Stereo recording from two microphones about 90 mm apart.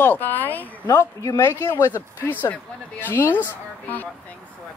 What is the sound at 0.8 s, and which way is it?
A man's voice, 35° left (ahead or behind).